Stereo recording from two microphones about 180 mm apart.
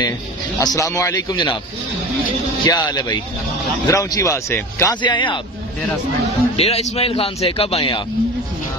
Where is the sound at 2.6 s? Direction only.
20° left (ahead or behind).